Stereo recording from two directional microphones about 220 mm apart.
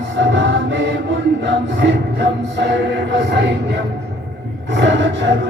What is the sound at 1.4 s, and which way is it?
Music, 55° right (ahead or behind).